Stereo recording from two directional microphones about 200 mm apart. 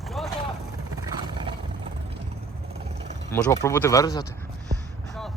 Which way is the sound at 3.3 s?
15° left (ahead or behind).